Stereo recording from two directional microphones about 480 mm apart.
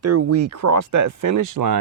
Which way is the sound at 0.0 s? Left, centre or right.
Right.